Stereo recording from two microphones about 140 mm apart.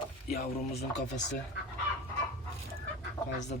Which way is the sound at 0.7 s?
50° left (ahead or behind).